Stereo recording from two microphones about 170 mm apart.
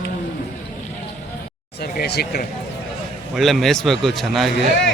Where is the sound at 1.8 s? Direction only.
70° left (ahead or behind).